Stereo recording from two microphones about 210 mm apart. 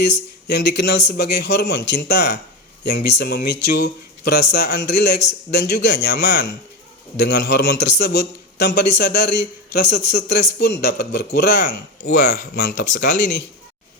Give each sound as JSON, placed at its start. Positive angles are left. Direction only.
{"t": 0.1, "sound": "a man's voice", "side_deg": 55}